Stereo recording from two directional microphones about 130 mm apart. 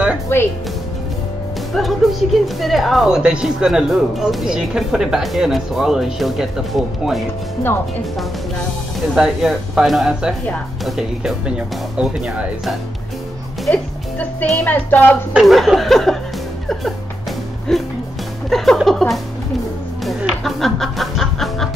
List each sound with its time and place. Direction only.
0.3 s speech: 20° left (ahead or behind)
1.7 s a woman's voice: centre (ahead or behind)
9.1 s a woman's voice: 5° right (ahead or behind)
13.7 s speech: 10° left (ahead or behind)
15.3 s a woman's voice: centre (ahead or behind)
17.7 s a woman's voice: centre (ahead or behind)
18.5 s music: centre (ahead or behind)